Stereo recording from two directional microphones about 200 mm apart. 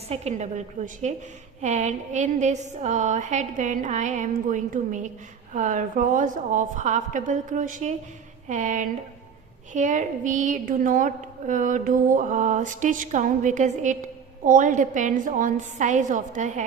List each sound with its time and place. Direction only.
0.1 s a woman's voice: 35° right (ahead or behind)